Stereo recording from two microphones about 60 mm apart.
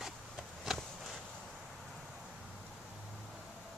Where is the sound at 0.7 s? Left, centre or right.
Centre.